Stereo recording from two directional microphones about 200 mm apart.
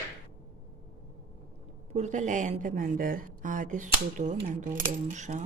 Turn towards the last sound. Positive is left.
turn(degrees=-35)  # may be behind; listen again after turning